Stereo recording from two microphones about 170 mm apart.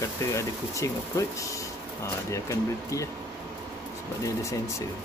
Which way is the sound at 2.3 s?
20° left (ahead or behind).